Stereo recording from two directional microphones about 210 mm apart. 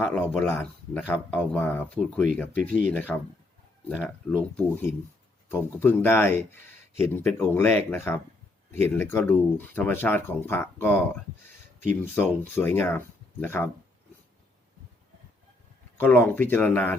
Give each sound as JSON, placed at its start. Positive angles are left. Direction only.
{"t": 0.0, "sound": "speech", "side_deg": 5}
{"t": 2.6, "sound": "speech", "side_deg": -40}
{"t": 3.8, "sound": "speech", "side_deg": 0}
{"t": 12.1, "sound": "speech", "side_deg": 10}
{"t": 16.0, "sound": "speech", "side_deg": 10}